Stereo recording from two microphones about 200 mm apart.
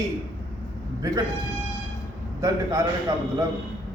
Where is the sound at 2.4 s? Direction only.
15° right (ahead or behind).